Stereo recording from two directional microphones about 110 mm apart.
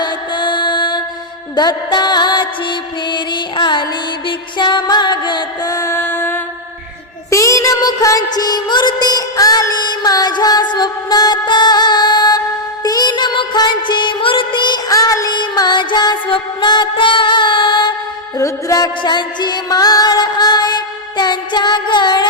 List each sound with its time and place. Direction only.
0.0 s mantra: 45° left (ahead or behind)
1.5 s music: 40° left (ahead or behind)
14.8 s music: 35° left (ahead or behind)
18.3 s music: 30° left (ahead or behind)